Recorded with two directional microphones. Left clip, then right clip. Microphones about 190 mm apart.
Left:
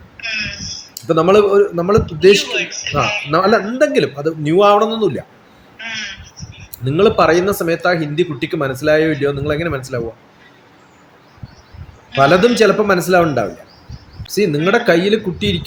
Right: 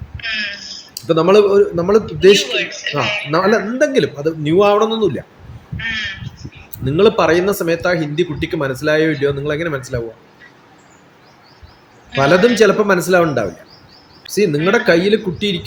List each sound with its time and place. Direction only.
0.3 s a sound: 15° right (ahead or behind)
0.9 s speech: centre (ahead or behind)
2.5 s speech: 15° right (ahead or behind)
3.3 s speech: centre (ahead or behind)
5.7 s a sound: 15° right (ahead or behind)
6.8 s speech: centre (ahead or behind)
12.2 s speech: centre (ahead or behind)